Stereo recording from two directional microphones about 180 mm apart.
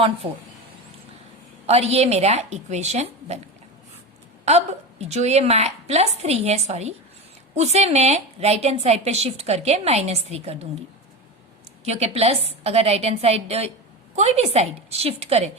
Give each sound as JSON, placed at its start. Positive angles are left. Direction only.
{"t": 0.2, "sound": "a woman's voice", "side_deg": -30}
{"t": 1.6, "sound": "a woman's voice", "side_deg": -35}
{"t": 4.4, "sound": "a woman's voice", "side_deg": -35}
{"t": 11.9, "sound": "a woman's voice", "side_deg": -35}